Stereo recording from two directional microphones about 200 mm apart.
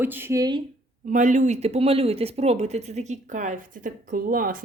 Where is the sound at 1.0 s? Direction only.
40° right (ahead or behind).